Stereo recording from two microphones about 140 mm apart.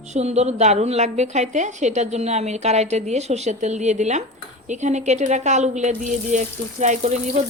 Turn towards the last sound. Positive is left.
turn(degrees=-60)  # may be behind; listen again after turning